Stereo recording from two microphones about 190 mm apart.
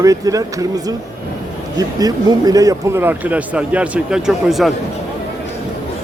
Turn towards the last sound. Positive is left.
turn(degrees=0)  # may be behind; listen again after turning